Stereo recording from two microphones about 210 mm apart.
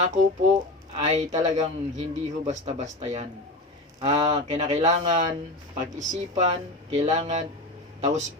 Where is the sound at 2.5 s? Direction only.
35° right (ahead or behind).